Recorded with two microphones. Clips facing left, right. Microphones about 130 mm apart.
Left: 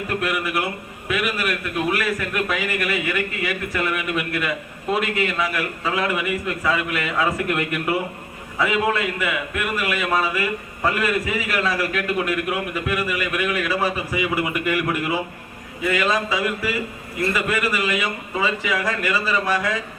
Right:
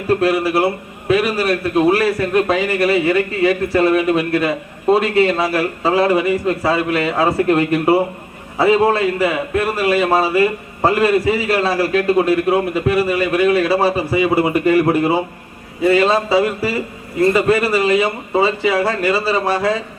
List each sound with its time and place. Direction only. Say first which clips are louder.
0.1 s a man's voice: right 10 dB; 30° right (ahead or behind)